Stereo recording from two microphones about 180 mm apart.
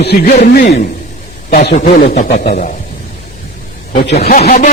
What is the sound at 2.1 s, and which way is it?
Speech, 40° left (ahead or behind).